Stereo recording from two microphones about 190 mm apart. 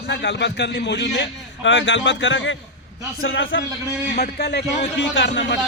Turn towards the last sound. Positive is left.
turn(degrees=70)  # may be behind; listen again after turning